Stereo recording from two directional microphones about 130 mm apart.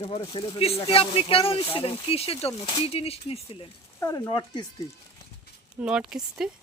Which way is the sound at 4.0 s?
25° left (ahead or behind).